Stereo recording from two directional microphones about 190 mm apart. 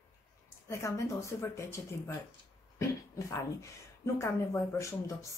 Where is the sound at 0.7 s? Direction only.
15° left (ahead or behind).